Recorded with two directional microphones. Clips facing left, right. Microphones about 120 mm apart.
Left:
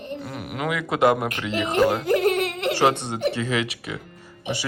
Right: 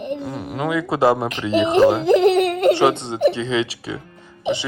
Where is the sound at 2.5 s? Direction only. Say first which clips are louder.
Right 10 dB; 50° right (ahead or behind).